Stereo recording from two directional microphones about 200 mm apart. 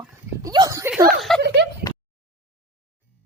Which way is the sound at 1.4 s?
55° right (ahead or behind).